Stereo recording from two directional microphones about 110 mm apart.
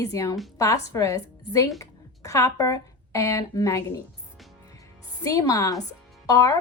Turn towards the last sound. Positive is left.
turn(degrees=30)  # may be behind; listen again after turning